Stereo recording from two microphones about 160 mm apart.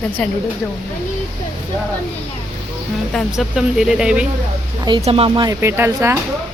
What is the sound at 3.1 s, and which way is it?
Speech, centre (ahead or behind).